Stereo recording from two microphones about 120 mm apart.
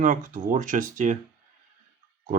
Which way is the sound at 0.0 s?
90° right.